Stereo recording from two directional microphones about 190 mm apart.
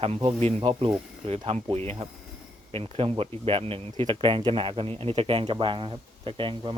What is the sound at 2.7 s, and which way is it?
Speech, 30° right (ahead or behind).